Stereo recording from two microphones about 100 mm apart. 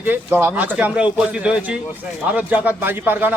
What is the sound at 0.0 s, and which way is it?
A man's voice, 20° right (ahead or behind).